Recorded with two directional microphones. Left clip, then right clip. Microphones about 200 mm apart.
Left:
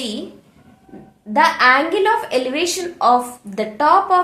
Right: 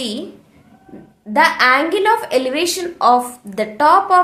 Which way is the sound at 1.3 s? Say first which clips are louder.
Even; 25° right (ahead or behind).